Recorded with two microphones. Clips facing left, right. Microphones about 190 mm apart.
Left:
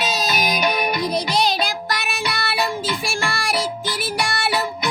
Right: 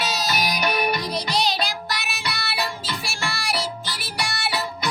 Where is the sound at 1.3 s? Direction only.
50° left (ahead or behind).